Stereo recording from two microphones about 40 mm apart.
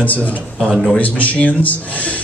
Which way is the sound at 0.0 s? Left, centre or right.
Left.